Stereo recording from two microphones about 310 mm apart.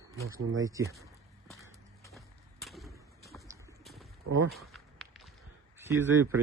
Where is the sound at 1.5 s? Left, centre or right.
Centre.